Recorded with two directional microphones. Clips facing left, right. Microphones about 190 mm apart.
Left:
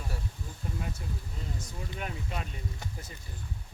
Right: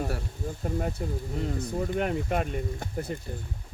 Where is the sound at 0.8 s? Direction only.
45° right (ahead or behind).